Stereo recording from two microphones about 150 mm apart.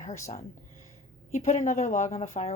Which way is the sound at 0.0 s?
60° left (ahead or behind).